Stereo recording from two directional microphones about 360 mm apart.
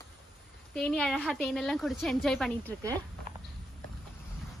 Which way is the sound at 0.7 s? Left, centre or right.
Centre.